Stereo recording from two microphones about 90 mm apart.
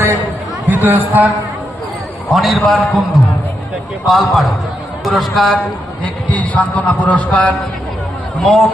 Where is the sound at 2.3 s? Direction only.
Centre (ahead or behind).